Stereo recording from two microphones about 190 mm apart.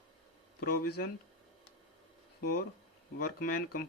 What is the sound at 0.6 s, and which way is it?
Speech, 50° left (ahead or behind).